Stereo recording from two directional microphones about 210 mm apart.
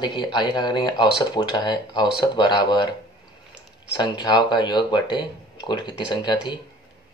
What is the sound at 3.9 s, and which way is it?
Speech, 20° left (ahead or behind).